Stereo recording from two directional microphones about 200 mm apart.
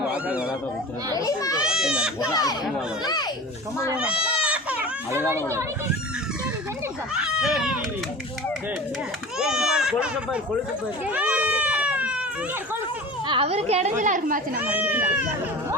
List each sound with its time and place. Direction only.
0.1 s a sound: 5° right (ahead or behind)
1.1 s a child's voice: 15° left (ahead or behind)
1.5 s goat: 5° right (ahead or behind)
2.3 s speech: 20° left (ahead or behind)
3.9 s baby cry: 5° right (ahead or behind)
5.3 s speech: 15° right (ahead or behind)
7.1 s a child's voice: 5° right (ahead or behind)
9.4 s speech: 5° right (ahead or behind)
11.1 s a sound: 5° right (ahead or behind)
13.2 s a child's voice: 25° right (ahead or behind); by 14.6 s 40° right (ahead or behind)
14.6 s speech: 10° right (ahead or behind)